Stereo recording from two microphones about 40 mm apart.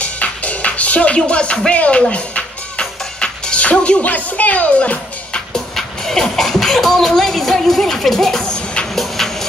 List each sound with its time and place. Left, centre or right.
0.0 s music: left
3.7 s speech: left
4.0 s speech: left
5.5 s speech: centre
8.9 s a sound: centre